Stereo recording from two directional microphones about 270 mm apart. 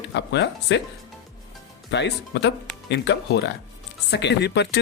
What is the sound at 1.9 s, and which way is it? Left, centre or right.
Speech, left.